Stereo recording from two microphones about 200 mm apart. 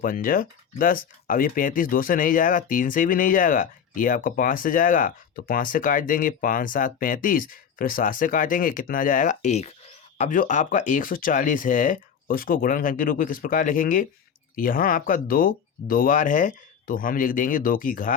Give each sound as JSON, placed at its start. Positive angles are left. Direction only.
{"t": 0.0, "sound": "speech", "side_deg": 45}